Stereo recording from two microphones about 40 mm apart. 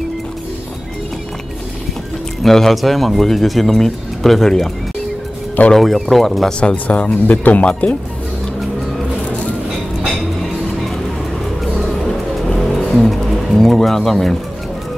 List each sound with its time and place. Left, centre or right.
2.4 s speech: centre
5.8 s speech: centre
6.9 s speech: left
12.5 s music: centre